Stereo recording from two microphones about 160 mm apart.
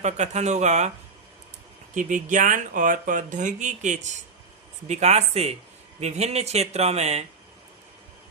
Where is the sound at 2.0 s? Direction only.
55° right (ahead or behind).